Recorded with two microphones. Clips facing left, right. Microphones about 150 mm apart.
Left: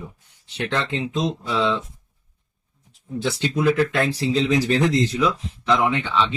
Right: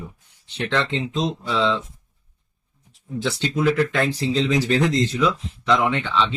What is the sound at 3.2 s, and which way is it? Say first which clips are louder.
Speech: left 1 dB; 5° left (ahead or behind).